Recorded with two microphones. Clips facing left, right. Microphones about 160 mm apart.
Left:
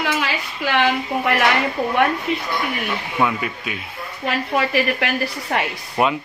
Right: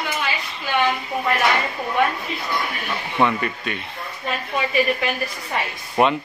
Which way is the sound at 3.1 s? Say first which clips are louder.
Right 2 dB; 5° left (ahead or behind).